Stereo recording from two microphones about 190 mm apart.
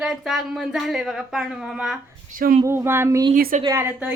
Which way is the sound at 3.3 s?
45° right (ahead or behind).